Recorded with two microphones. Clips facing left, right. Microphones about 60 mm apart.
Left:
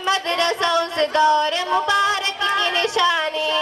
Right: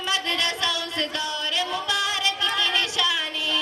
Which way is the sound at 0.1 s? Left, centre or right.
Left.